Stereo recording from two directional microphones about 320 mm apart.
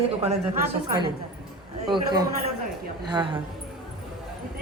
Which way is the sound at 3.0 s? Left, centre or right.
Centre.